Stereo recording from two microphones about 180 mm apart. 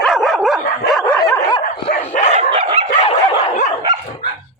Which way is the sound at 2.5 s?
30° right (ahead or behind).